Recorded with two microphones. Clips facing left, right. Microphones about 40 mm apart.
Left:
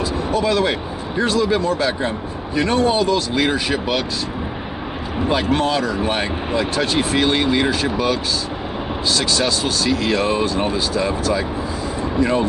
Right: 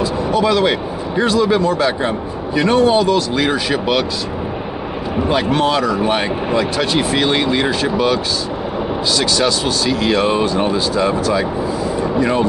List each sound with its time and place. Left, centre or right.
1.4 s speech: centre
2.6 s speech: right
5.6 s speech: right
7.2 s speech: centre
10.4 s speech: centre